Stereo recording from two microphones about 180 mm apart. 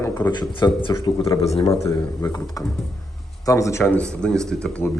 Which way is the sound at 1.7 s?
15° left (ahead or behind).